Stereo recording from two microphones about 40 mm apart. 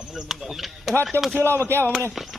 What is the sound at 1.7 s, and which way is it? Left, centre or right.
Speech, right.